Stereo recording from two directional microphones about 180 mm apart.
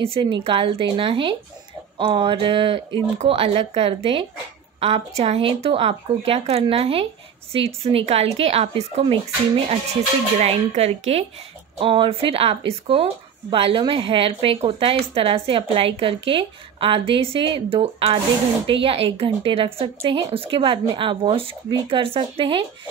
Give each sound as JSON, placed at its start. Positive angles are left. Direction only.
{"t": 0.0, "sound": "a woman's voice", "side_deg": -30}
{"t": 10.4, "sound": "a woman's voice", "side_deg": -35}